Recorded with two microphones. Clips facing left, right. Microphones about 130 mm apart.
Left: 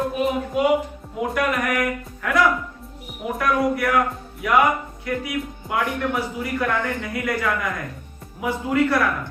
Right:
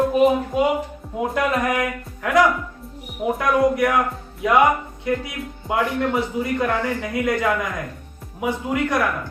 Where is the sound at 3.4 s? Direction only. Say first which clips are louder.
Right 2 dB; 20° right (ahead or behind).